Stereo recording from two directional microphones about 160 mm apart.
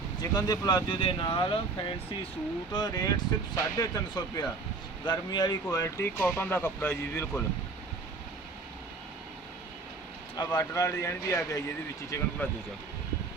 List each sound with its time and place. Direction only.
0.2 s speech: 25° left (ahead or behind)
10.3 s speech: 25° left (ahead or behind)